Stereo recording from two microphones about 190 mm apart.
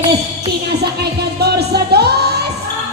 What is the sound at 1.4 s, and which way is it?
Music, 60° right (ahead or behind).